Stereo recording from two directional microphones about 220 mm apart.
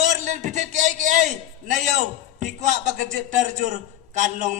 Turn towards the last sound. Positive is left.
turn(degrees=-35)  # may be behind; listen again after turning